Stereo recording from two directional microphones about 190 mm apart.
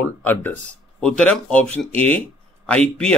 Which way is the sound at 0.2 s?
10° left (ahead or behind).